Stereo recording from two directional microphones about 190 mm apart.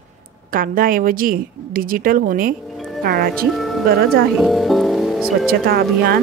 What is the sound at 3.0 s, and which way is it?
Speech, 50° right (ahead or behind).